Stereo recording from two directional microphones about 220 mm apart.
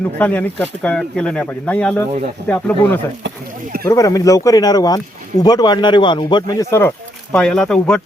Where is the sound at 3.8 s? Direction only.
15° left (ahead or behind).